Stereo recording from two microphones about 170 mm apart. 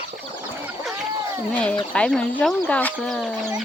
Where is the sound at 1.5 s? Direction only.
10° left (ahead or behind).